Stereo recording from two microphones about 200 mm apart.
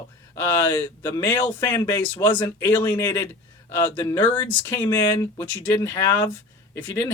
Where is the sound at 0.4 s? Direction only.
15° left (ahead or behind).